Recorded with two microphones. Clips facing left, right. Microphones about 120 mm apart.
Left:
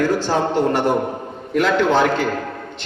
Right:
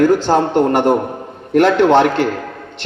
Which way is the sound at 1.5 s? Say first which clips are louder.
Right 6 dB; 65° right (ahead or behind).